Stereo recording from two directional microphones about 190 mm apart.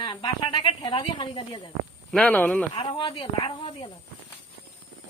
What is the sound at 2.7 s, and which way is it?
Speech, 25° left (ahead or behind).